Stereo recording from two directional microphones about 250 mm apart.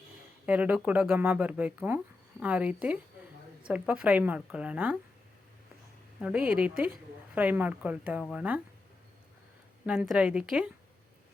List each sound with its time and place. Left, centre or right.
0.4 s a woman's voice: centre
6.1 s a woman's voice: centre
6.7 s a woman's voice: right
7.3 s speech: centre
9.8 s a woman's voice: centre